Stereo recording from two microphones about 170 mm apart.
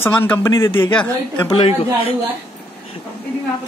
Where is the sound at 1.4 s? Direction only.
30° left (ahead or behind).